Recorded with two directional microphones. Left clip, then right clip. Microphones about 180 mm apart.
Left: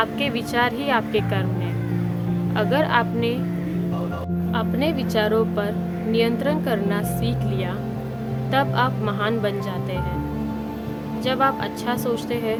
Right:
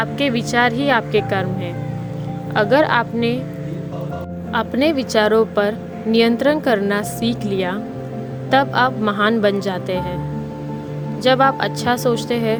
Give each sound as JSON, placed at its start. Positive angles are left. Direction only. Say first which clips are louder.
{"t": 0.0, "sound": "speech", "louder": "right 3 dB", "side_deg": -30}
{"t": 2.6, "sound": "speech", "louder": "right 6 dB", "side_deg": -30}
{"t": 4.5, "sound": "a woman's voice", "louder": "right 7 dB", "side_deg": -35}
{"t": 11.2, "sound": "a woman's voice", "louder": "right 7 dB", "side_deg": -35}